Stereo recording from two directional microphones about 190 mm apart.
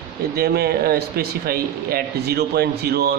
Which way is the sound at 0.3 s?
55° right (ahead or behind).